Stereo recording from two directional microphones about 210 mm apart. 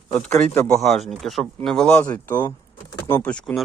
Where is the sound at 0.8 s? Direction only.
Centre (ahead or behind).